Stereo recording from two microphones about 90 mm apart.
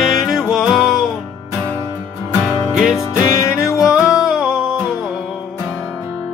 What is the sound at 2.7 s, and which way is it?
Music, 5° right (ahead or behind).